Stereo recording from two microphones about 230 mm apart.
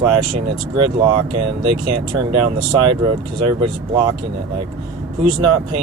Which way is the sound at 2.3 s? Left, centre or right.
Right.